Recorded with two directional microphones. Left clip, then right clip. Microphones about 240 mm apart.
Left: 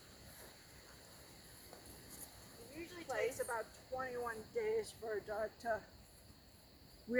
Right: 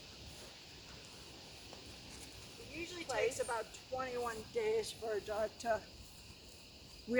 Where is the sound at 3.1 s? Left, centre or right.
Centre.